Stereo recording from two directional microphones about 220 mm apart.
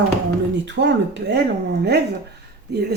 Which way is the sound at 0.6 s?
55° right (ahead or behind).